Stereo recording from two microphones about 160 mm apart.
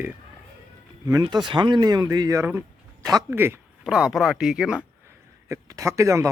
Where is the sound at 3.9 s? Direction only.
5° right (ahead or behind).